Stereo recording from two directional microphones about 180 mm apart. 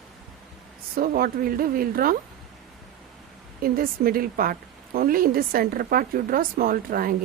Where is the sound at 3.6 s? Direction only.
55° right (ahead or behind).